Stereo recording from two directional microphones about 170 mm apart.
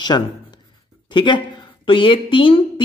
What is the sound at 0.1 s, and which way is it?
A woman's voice, 25° left (ahead or behind).